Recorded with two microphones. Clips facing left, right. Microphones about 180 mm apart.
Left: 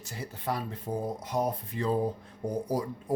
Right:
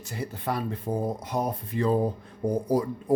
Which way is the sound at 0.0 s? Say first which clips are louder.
Right 4 dB; 60° right (ahead or behind).